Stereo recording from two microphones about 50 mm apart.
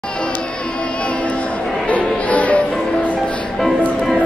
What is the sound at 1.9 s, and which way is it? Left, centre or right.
Music, left.